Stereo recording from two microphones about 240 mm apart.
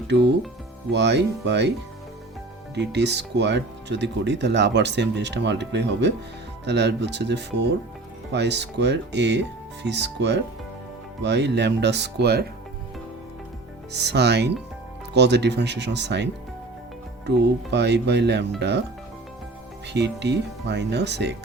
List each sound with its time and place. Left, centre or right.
0.9 s speech: right
2.7 s speech: right
14.0 s speech: right
19.9 s speech: right